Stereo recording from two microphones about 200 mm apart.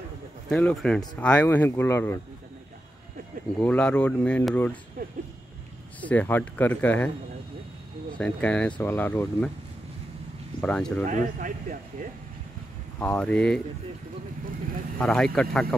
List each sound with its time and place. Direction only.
0.5 s speech: 5° left (ahead or behind)
3.6 s speech: 5° left (ahead or behind)
5.9 s speech: 10° left (ahead or behind)
8.2 s speech: 5° left (ahead or behind)
10.6 s speech: 5° left (ahead or behind)
11.1 s speech: 40° right (ahead or behind)
13.0 s speech: 5° left (ahead or behind)
15.0 s speech: 5° left (ahead or behind)